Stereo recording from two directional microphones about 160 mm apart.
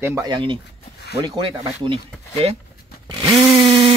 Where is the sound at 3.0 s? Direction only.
30° right (ahead or behind).